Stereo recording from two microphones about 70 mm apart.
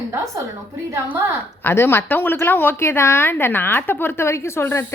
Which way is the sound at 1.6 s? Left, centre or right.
Left.